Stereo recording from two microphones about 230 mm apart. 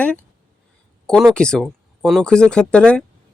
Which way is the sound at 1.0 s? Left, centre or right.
Centre.